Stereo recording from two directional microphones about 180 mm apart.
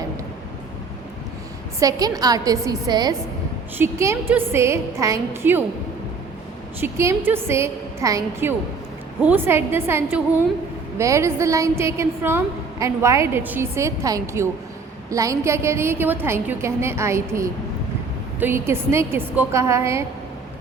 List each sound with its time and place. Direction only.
1.8 s a woman's voice: 20° right (ahead or behind)
6.7 s a woman's voice: 15° right (ahead or behind)